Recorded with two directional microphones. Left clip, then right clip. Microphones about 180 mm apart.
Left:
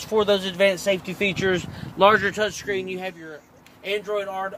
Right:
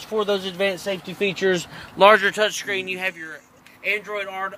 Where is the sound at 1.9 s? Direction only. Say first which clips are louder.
Right 3 dB; 20° right (ahead or behind); by 3.1 s centre (ahead or behind).